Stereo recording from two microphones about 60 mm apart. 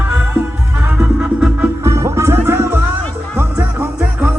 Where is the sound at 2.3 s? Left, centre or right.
Right.